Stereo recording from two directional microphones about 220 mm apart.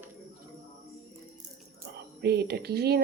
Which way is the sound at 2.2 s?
45° right (ahead or behind).